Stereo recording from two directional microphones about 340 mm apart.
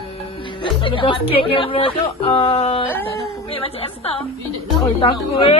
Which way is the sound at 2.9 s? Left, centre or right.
Centre.